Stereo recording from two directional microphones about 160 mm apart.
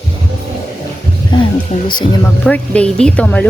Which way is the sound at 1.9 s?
30° left (ahead or behind).